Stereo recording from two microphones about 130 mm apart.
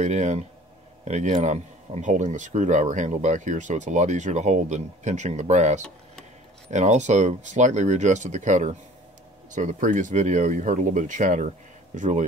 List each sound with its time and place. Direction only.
0.0 s speech: 65° right (ahead or behind)